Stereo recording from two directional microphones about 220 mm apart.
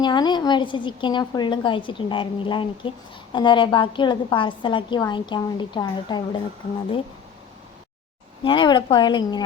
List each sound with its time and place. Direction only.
0.0 s a woman's voice: 20° left (ahead or behind)
8.4 s a woman's voice: 20° left (ahead or behind)